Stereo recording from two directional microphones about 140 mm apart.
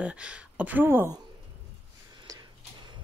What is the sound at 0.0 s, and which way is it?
Speech, 10° right (ahead or behind).